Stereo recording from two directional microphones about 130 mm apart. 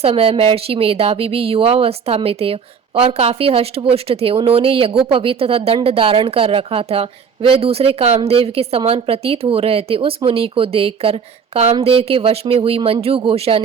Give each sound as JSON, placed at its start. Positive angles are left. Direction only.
{"t": 0.0, "sound": "speech", "side_deg": -50}